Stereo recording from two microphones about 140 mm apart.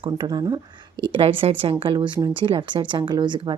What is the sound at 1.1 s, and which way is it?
Speech, 40° right (ahead or behind).